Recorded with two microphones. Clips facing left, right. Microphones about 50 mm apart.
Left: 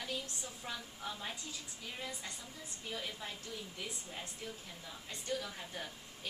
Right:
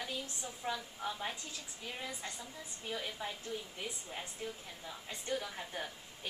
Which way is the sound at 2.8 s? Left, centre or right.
Centre.